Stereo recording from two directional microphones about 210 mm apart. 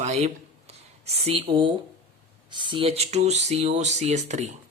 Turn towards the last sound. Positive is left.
turn(degrees=-35)  # may be behind; listen again after turning